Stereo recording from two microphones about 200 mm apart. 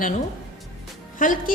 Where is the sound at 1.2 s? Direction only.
45° left (ahead or behind).